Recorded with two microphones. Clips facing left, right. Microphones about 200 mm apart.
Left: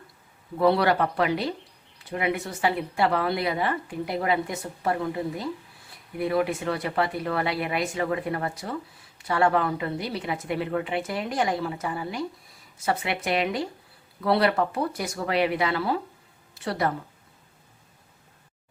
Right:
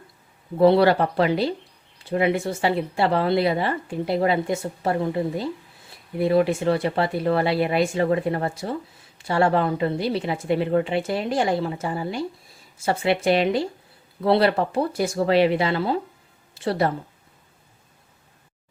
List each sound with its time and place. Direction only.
0.6 s speech: 30° right (ahead or behind)